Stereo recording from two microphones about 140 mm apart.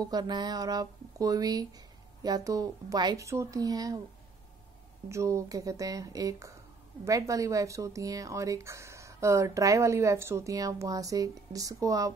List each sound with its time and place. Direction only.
0.0 s speech: 30° right (ahead or behind)
5.1 s speech: 20° right (ahead or behind)